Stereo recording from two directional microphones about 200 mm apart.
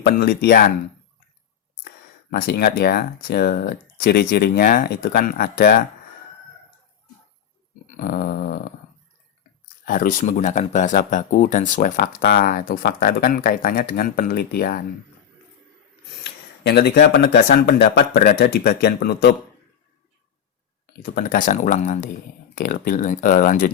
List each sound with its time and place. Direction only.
0.0 s speech: 50° left (ahead or behind)
2.3 s speech: 55° left (ahead or behind)
7.9 s a sound: 40° left (ahead or behind)
9.8 s speech: 45° left (ahead or behind)
16.2 s speech: 55° left (ahead or behind)
21.0 s speech: 45° left (ahead or behind)